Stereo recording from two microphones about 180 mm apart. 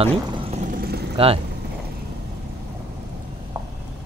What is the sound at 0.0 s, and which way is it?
Pour, 30° right (ahead or behind).